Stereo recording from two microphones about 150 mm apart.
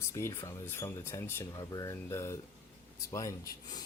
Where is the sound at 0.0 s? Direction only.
20° left (ahead or behind).